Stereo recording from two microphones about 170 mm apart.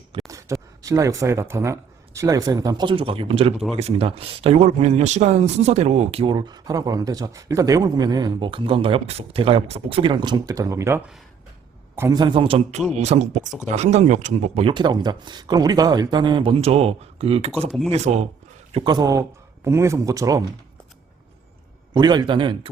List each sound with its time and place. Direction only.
0.3 s a man's voice: 20° right (ahead or behind); by 17.7 s 35° right (ahead or behind)
17.7 s speech: centre (ahead or behind)
17.9 s speech: 40° right (ahead or behind)
18.7 s a man's voice: 25° right (ahead or behind)
21.9 s a man's voice: 25° right (ahead or behind)